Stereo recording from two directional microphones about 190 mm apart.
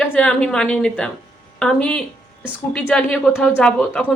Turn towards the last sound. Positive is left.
turn(degrees=5)  # may be behind; listen again after turning